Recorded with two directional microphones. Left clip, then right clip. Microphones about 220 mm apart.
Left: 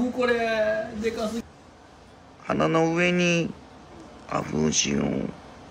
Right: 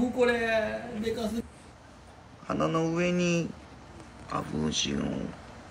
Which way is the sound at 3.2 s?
90° left.